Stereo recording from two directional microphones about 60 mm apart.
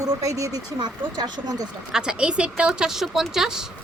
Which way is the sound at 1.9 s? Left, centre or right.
Centre.